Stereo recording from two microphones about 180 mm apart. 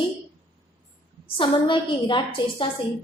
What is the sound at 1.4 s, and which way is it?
A woman's voice, 25° left (ahead or behind).